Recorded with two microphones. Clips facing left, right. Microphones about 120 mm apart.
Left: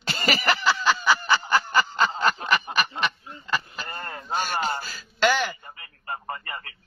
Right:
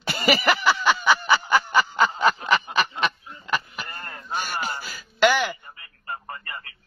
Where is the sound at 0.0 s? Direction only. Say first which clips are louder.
Right 4 dB; 15° right (ahead or behind).